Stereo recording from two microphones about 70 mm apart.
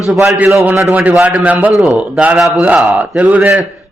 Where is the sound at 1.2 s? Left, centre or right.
Right.